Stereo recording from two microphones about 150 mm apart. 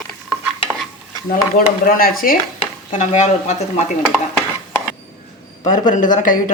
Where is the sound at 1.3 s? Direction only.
70° left (ahead or behind).